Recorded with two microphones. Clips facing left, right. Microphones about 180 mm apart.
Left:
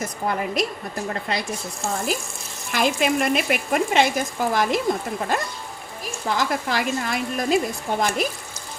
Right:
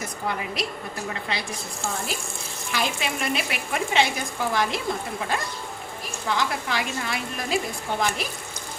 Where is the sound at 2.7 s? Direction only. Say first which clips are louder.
Left 7 dB; 50° left (ahead or behind).